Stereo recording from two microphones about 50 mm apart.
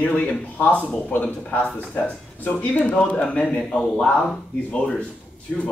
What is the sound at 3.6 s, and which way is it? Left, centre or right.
Speech, centre.